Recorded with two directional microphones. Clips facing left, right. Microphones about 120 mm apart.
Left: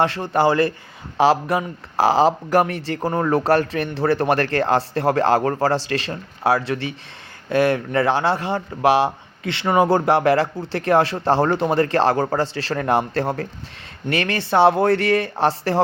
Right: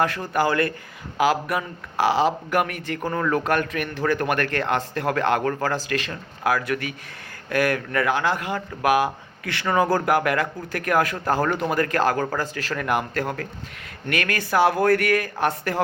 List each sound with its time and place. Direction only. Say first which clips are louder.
0.0 s speech: left 4 dB; 30° left (ahead or behind)